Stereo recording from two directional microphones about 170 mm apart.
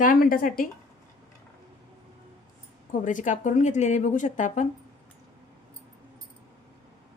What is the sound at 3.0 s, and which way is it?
A woman's voice, 50° left (ahead or behind).